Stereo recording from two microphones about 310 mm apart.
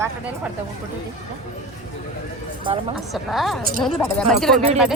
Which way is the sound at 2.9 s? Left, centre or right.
Centre.